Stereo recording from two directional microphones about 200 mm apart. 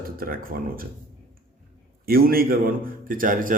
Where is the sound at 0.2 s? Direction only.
45° right (ahead or behind).